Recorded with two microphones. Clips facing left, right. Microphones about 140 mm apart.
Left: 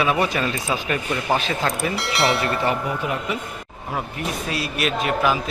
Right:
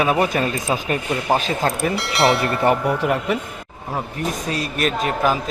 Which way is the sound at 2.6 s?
65° right (ahead or behind).